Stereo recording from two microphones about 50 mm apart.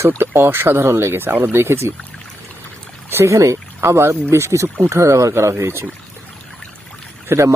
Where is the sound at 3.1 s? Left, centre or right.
Right.